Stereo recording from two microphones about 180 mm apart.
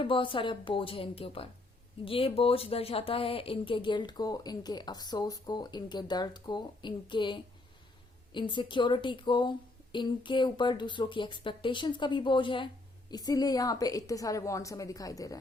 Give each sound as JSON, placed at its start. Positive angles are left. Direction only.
{"t": 0.0, "sound": "speech", "side_deg": 30}